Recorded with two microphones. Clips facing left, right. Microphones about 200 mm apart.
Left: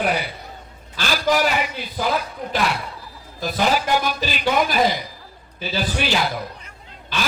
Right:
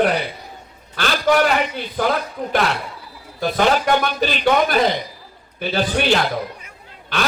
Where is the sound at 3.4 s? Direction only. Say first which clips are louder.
Right 3 dB; 60° right (ahead or behind).